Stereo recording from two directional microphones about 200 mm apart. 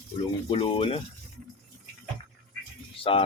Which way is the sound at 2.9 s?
25° left (ahead or behind).